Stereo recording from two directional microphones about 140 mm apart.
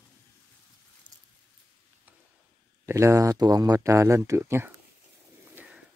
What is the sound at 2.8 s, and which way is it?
Speech, 20° right (ahead or behind).